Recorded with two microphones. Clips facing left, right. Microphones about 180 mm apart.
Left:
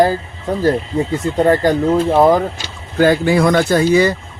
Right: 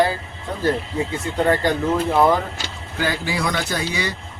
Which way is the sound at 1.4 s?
40° left (ahead or behind).